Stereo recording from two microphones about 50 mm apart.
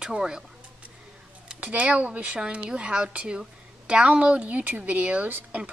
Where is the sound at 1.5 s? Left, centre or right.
Right.